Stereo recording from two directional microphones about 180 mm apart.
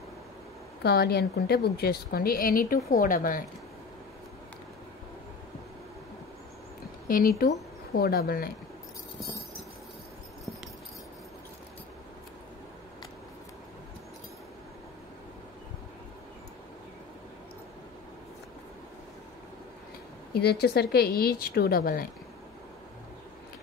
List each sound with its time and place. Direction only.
0.8 s a woman's voice: 60° left (ahead or behind)
7.1 s a woman's voice: 50° left (ahead or behind)
20.3 s a woman's voice: 65° left (ahead or behind)